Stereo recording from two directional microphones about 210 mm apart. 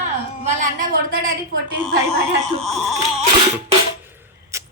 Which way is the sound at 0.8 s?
45° right (ahead or behind).